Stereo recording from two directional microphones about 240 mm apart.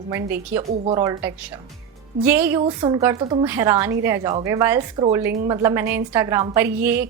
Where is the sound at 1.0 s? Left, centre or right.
Centre.